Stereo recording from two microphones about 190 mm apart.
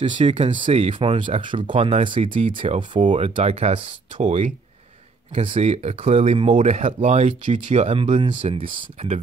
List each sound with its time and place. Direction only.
0.0 s speech: 40° right (ahead or behind)